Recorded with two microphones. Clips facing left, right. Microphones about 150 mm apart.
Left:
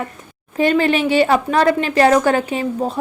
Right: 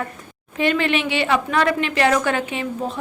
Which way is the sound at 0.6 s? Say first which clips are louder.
Left 5 dB; 40° left (ahead or behind).